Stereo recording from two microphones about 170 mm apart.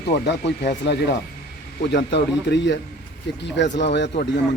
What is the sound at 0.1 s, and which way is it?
A man's voice, 80° left.